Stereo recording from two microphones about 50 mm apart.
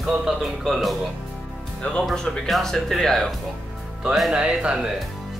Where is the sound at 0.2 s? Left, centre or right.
Centre.